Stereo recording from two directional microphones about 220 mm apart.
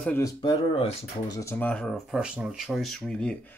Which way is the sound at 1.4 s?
10° left (ahead or behind).